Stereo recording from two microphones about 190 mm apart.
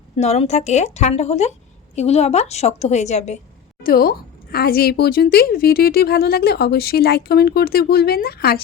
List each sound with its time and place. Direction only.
0.2 s a woman's voice: 35° left (ahead or behind)
3.8 s a woman's voice: 50° left (ahead or behind)